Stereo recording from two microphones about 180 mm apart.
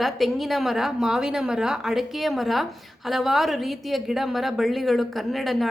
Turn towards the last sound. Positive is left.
turn(degrees=0)  # may be behind; listen again after turning